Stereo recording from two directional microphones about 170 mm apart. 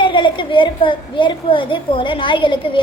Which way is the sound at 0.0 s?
30° left (ahead or behind).